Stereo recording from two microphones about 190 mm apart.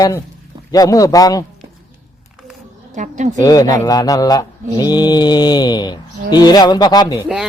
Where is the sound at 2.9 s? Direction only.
40° right (ahead or behind).